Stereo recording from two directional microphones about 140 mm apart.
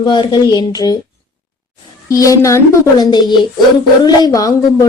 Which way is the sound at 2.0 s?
25° left (ahead or behind).